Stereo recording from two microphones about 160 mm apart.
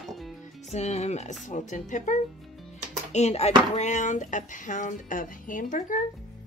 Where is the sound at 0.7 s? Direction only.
45° left (ahead or behind).